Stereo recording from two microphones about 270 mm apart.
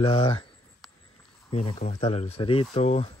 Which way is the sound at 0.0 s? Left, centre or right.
Left.